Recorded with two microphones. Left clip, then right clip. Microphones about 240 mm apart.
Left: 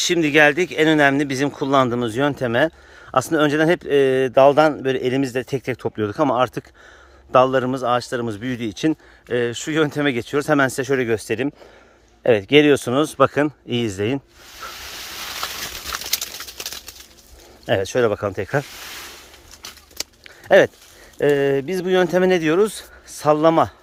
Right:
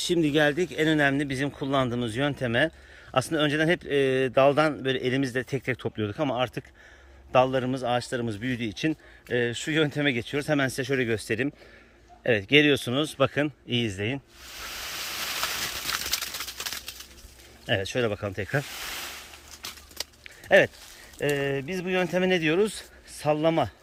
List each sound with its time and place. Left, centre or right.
0.0 s speech: centre
12.2 s speech: centre
16.1 s a sound: left
17.7 s speech: centre
20.2 s a sound: left
21.2 s speech: left